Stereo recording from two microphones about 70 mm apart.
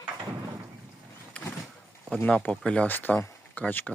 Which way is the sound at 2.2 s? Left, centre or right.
Centre.